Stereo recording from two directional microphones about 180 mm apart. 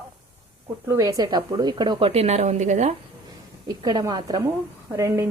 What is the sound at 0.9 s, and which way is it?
A woman's voice, 20° right (ahead or behind).